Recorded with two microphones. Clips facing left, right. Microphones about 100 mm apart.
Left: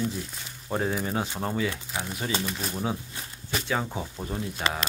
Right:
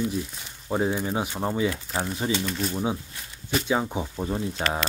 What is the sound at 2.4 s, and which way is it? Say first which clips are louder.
Speech: right 4 dB; 5° left (ahead or behind).